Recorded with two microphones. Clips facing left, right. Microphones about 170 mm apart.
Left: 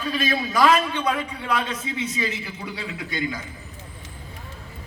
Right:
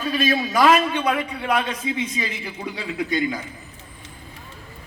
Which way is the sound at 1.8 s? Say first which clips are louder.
Right 5 dB; 20° right (ahead or behind).